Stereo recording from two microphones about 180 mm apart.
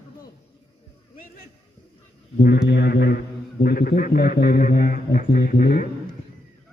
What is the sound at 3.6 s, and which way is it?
Speech, 60° left (ahead or behind).